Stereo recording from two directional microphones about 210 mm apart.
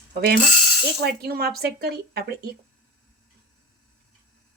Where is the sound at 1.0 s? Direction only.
50° right (ahead or behind).